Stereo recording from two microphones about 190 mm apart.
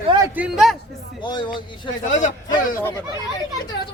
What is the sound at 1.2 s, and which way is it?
Speech, 25° left (ahead or behind).